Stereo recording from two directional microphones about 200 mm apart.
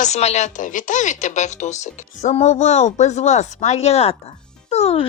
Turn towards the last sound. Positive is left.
turn(degrees=30)  # may be behind; listen again after turning